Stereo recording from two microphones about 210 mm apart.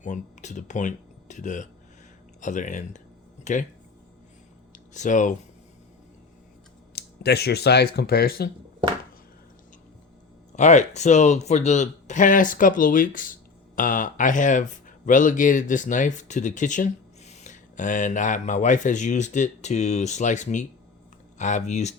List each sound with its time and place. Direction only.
0.0 s speech: 35° left (ahead or behind)
4.9 s speech: 35° left (ahead or behind)
6.9 s speech: 50° left (ahead or behind)
10.5 s speech: 35° left (ahead or behind)